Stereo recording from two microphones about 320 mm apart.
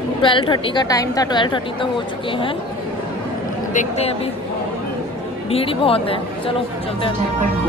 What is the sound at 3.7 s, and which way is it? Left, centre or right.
Speech, left.